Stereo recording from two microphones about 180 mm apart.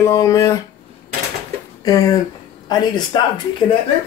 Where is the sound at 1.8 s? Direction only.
20° left (ahead or behind).